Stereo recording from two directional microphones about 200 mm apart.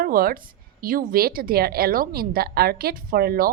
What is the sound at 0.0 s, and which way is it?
Speech, 45° right (ahead or behind).